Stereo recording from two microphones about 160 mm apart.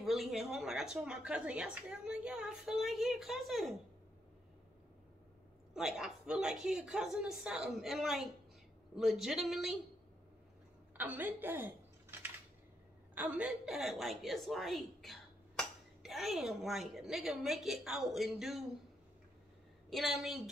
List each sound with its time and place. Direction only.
0.0 s a woman's voice: centre (ahead or behind)
5.8 s a woman's voice: 5° right (ahead or behind)
11.0 s a woman's voice: 10° right (ahead or behind)
19.9 s a woman's voice: centre (ahead or behind)